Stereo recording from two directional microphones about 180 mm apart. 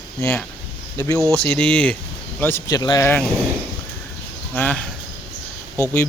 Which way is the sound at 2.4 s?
15° left (ahead or behind).